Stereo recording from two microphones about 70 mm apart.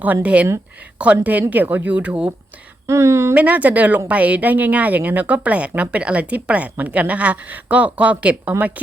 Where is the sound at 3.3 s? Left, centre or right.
Right.